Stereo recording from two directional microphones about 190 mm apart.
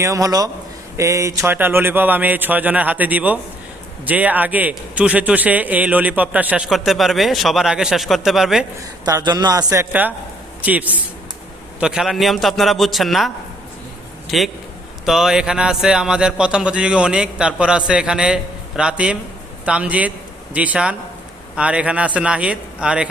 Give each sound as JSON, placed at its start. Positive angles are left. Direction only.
{"t": 0.0, "sound": "a man's voice", "side_deg": -15}
{"t": 9.0, "sound": "a man's voice", "side_deg": -20}